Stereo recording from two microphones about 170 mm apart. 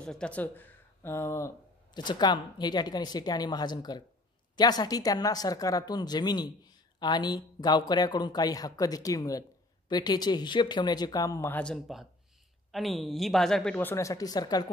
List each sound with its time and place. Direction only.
0.0 s speech: 5° left (ahead or behind); by 14.7 s 25° left (ahead or behind)